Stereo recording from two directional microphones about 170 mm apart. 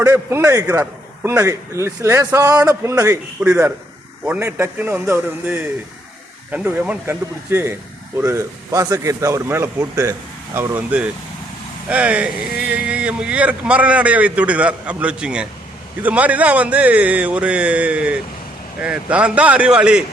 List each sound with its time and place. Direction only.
0.0 s a man's voice: 15° right (ahead or behind)